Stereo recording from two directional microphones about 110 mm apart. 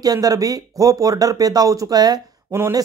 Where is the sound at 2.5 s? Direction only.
25° right (ahead or behind).